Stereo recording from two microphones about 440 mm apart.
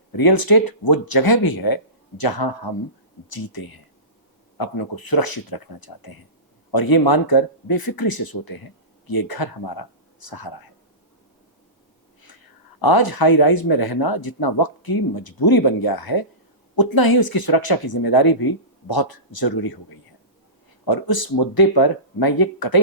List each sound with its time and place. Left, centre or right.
0.2 s speech: left
12.8 s speech: left
20.8 s speech: left